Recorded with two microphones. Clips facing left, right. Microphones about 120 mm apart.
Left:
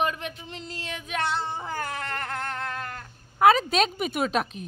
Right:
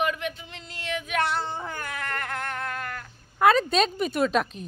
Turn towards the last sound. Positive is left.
turn(degrees=5)  # may be behind; listen again after turning